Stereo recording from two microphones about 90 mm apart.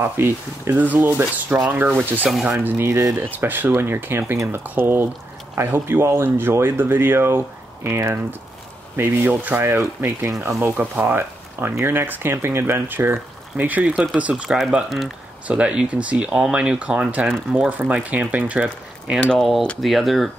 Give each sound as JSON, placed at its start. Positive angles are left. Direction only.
{"t": 0.0, "sound": "speech", "side_deg": -25}
{"t": 2.8, "sound": "speech", "side_deg": -30}
{"t": 3.2, "sound": "speech", "side_deg": -20}
{"t": 19.2, "sound": "speech", "side_deg": 0}